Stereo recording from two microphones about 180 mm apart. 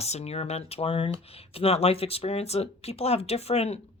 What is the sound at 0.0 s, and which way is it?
Speech, 35° left (ahead or behind).